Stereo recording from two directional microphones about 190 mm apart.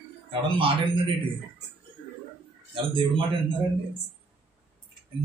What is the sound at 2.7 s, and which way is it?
Speech, 25° right (ahead or behind).